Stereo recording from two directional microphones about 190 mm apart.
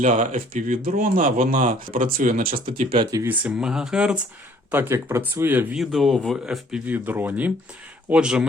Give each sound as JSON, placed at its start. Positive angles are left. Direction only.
{"t": 0.0, "sound": "speech", "side_deg": -40}
{"t": 2.9, "sound": "speech", "side_deg": -20}